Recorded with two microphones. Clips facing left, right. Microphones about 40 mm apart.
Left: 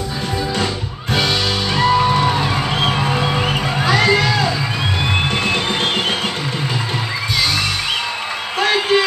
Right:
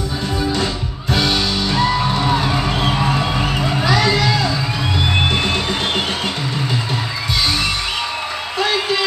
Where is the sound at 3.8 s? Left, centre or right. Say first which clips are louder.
Left 2 dB; left.